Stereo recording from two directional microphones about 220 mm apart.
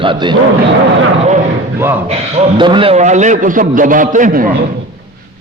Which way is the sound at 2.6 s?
20° right (ahead or behind).